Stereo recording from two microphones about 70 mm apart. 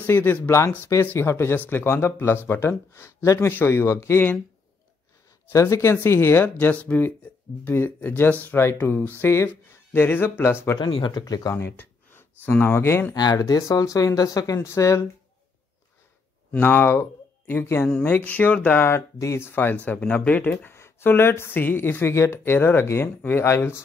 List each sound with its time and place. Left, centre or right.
0.0 s speech: left
5.5 s speech: left
10.8 s speech: left
11.5 s a sound: left
12.7 s speech: left
13.1 s speech: left
16.5 s speech: left
18.9 s speech: left
20.6 s speech: left